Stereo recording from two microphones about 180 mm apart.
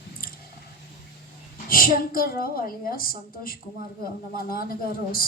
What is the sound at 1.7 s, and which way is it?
Speech, 55° left (ahead or behind).